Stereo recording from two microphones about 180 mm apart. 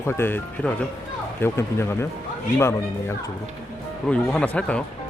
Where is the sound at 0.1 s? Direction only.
10° left (ahead or behind).